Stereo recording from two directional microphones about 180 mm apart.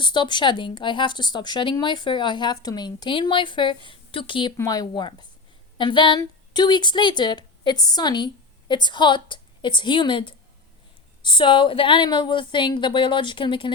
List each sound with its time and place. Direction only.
0.0 s a woman's voice: 25° left (ahead or behind)